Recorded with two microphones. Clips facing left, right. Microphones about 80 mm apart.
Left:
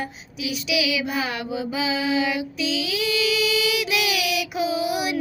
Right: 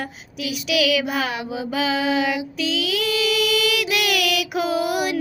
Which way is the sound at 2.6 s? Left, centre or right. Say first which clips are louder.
Right 3 dB; right.